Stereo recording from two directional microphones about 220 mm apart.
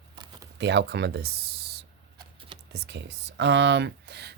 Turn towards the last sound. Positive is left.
turn(degrees=-50)  # may be behind; listen again after turning